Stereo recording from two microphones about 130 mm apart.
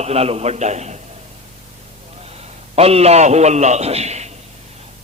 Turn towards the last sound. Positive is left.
turn(degrees=-60)  # may be behind; listen again after turning